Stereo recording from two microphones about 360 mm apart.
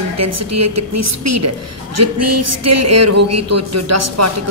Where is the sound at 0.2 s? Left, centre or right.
Right.